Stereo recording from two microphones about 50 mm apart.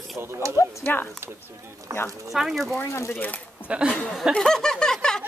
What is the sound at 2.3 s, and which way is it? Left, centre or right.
Speech, centre.